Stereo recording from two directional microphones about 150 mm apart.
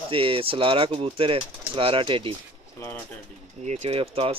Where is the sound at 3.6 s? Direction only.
50° right (ahead or behind).